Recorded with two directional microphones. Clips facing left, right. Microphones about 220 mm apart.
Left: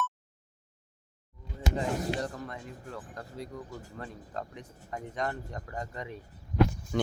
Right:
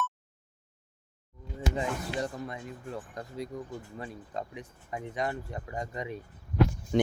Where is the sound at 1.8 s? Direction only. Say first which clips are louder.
Left 4 dB; 35° left (ahead or behind).